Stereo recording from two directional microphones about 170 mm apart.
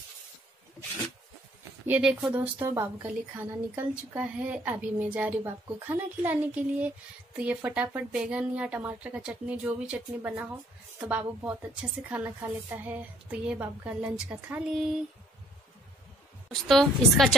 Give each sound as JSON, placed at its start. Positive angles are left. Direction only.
{"t": 1.9, "sound": "a woman's voice", "side_deg": -5}
{"t": 16.6, "sound": "a woman's voice", "side_deg": 0}